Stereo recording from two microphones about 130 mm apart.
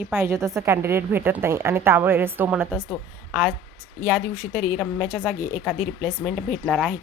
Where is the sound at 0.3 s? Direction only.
25° right (ahead or behind).